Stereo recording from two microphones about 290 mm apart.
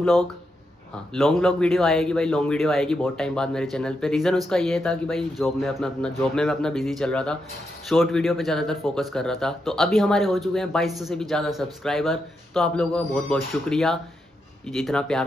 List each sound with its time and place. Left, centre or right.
0.0 s speech: centre